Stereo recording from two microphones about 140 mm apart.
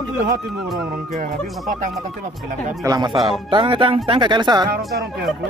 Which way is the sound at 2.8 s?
30° right (ahead or behind).